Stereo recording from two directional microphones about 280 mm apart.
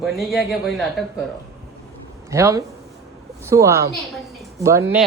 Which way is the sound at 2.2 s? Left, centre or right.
Centre.